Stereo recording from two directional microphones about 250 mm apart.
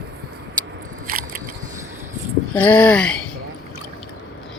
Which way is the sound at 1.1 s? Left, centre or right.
Right.